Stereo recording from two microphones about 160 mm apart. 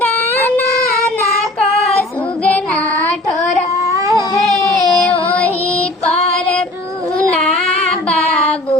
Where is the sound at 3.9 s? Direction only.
20° right (ahead or behind).